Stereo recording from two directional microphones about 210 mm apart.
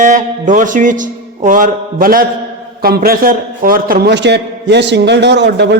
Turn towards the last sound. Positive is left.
turn(degrees=-55)  # may be behind; listen again after turning